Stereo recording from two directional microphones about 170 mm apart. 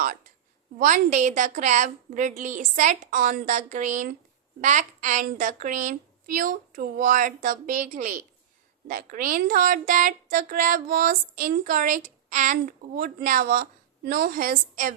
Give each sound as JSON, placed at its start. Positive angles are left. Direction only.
{"t": 0.8, "sound": "a woman's voice", "side_deg": -50}